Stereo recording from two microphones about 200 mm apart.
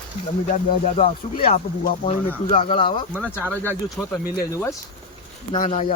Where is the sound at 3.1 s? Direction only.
10° left (ahead or behind).